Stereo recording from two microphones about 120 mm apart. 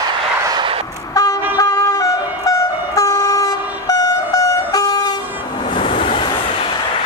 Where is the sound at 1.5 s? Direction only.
25° left (ahead or behind).